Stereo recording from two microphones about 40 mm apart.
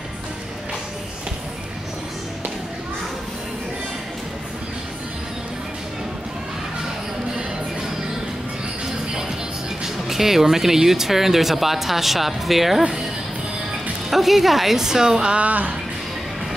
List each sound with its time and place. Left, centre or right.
10.0 s speech: centre
14.1 s a woman's voice: centre
15.3 s speech: right